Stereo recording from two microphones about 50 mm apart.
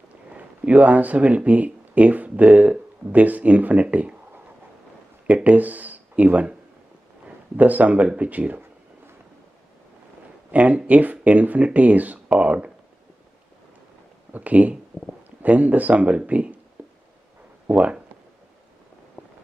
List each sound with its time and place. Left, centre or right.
0.7 s speech: right
5.2 s a man's voice: right
10.5 s speech: right
14.3 s speech: right
17.6 s speech: right